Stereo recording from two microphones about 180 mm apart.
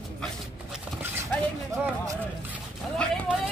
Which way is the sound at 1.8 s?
10° right (ahead or behind).